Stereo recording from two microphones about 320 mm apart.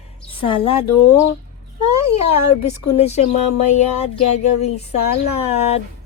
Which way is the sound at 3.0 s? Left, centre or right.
Left.